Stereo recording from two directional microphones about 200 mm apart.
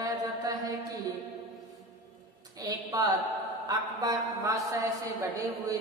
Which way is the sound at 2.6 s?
20° right (ahead or behind).